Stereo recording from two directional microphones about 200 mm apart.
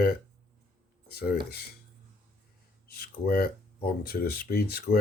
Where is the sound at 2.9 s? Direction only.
50° left (ahead or behind).